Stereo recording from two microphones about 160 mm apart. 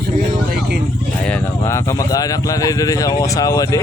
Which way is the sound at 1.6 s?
20° left (ahead or behind).